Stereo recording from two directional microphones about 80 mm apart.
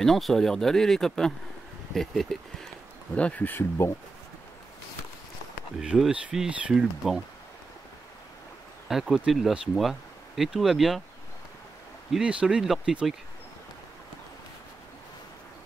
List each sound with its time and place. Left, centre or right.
0.0 s speech: centre
3.2 s speech: centre
5.8 s speech: centre
8.8 s speech: centre
12.1 s speech: centre